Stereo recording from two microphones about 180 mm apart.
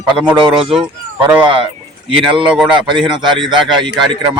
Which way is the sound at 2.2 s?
30° right (ahead or behind).